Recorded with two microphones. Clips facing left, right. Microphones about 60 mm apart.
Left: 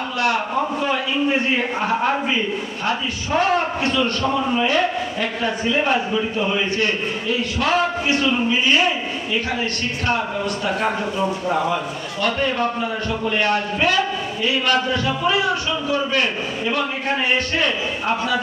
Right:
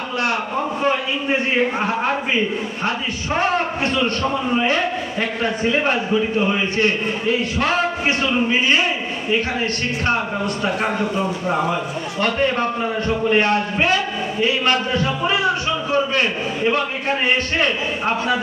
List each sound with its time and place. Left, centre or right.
3.3 s a man's voice: right
12.2 s a man's voice: right